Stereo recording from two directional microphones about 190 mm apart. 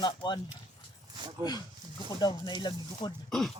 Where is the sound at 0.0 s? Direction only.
25° left (ahead or behind).